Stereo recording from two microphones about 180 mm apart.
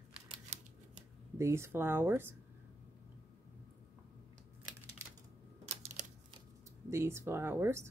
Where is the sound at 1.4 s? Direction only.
15° right (ahead or behind).